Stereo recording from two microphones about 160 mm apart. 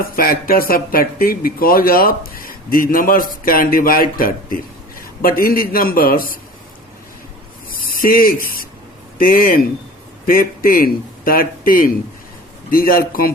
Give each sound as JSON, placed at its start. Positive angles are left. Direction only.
{"t": 0.0, "sound": "speech", "side_deg": 65}
{"t": 7.7, "sound": "spray", "side_deg": 65}
{"t": 9.1, "sound": "speech", "side_deg": 60}